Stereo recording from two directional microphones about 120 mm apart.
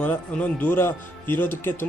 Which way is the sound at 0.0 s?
10° left (ahead or behind).